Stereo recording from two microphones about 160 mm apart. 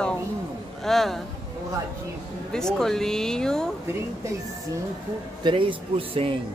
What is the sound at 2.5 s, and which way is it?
Speech, 5° left (ahead or behind).